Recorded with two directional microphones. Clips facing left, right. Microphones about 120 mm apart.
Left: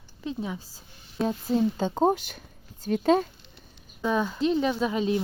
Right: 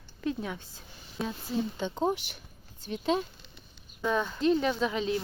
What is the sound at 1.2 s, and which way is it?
Speech, 40° left (ahead or behind).